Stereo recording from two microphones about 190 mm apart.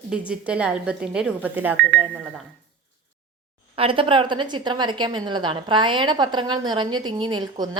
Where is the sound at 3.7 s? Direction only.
30° right (ahead or behind).